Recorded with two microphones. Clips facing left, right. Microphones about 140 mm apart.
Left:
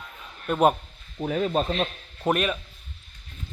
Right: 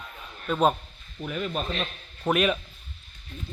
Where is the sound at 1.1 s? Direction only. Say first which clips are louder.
Left 6 dB; 35° left (ahead or behind).